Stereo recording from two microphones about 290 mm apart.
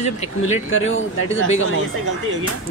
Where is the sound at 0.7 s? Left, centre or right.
Left.